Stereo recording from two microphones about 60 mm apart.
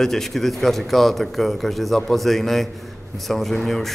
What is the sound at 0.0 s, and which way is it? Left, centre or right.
Speech, centre.